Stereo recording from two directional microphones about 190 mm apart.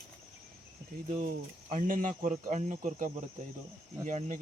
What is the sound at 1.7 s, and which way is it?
Speech, 40° right (ahead or behind).